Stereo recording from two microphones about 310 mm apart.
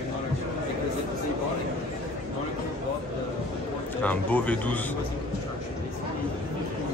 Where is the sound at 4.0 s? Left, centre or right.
Centre.